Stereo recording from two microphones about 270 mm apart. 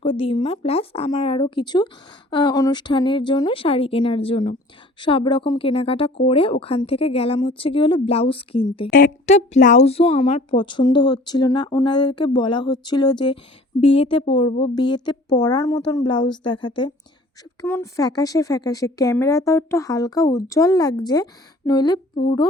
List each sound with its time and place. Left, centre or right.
0.0 s a woman's voice: centre
8.9 s speech: left